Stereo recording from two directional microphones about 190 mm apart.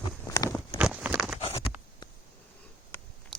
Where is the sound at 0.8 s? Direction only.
5° right (ahead or behind).